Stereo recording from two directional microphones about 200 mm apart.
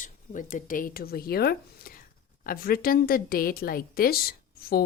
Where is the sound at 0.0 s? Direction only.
40° left (ahead or behind).